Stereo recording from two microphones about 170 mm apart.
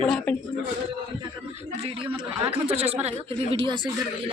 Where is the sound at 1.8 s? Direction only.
30° right (ahead or behind).